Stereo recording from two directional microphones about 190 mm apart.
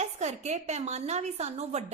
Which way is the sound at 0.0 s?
35° right (ahead or behind).